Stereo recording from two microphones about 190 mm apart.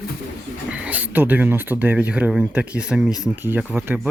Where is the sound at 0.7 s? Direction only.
5° right (ahead or behind).